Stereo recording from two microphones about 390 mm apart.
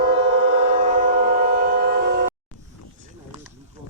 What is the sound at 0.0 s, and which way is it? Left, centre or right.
Train, right.